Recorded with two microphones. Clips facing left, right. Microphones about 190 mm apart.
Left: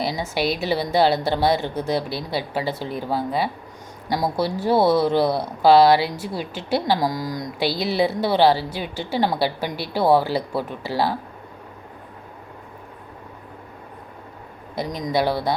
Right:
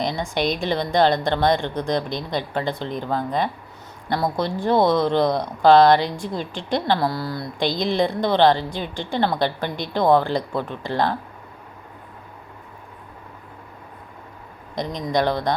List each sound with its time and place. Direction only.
0.0 s speech: 5° left (ahead or behind)
15.0 s speech: 10° left (ahead or behind)